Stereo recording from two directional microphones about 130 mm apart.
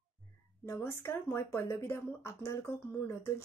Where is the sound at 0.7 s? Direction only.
15° left (ahead or behind).